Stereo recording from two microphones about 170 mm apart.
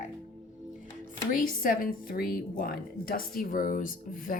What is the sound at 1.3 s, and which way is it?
A woman's voice, 55° left (ahead or behind).